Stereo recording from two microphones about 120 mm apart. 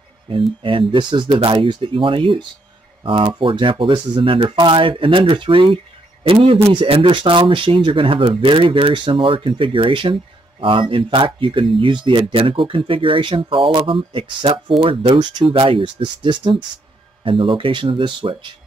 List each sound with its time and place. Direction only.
0.6 s speech: 45° right (ahead or behind)